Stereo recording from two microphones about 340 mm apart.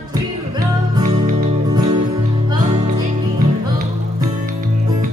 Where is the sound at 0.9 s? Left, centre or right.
Centre.